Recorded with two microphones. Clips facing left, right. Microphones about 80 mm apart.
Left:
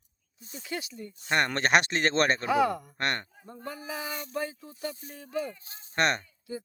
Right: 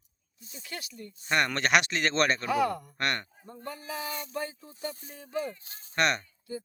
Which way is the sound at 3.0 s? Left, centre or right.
Left.